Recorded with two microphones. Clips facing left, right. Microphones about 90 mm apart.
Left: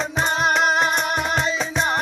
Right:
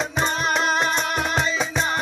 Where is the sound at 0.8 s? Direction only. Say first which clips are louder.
Left 2 dB; 15° left (ahead or behind).